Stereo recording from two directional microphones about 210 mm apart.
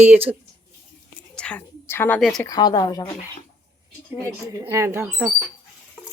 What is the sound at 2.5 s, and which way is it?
Speech, 20° left (ahead or behind).